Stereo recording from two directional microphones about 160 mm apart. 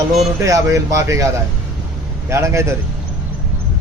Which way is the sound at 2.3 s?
15° right (ahead or behind).